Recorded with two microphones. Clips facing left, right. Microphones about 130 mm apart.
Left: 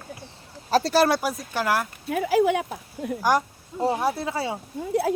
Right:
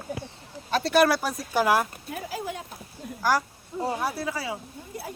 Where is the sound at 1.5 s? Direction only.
15° right (ahead or behind).